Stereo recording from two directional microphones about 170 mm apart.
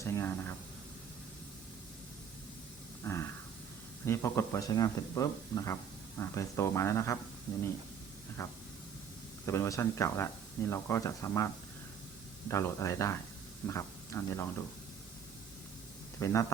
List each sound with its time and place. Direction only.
0.0 s speech: 15° left (ahead or behind)
3.0 s a sound: 15° left (ahead or behind)
4.0 s speech: 15° left (ahead or behind)
8.4 s vehicle: 20° left (ahead or behind)
9.5 s speech: 15° left (ahead or behind)
12.5 s speech: 15° left (ahead or behind)
16.2 s speech: 15° left (ahead or behind)